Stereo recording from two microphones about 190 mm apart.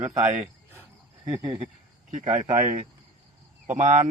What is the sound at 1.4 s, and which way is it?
Speech, 20° right (ahead or behind).